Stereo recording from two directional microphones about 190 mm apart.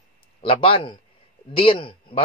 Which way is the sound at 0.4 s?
30° left (ahead or behind).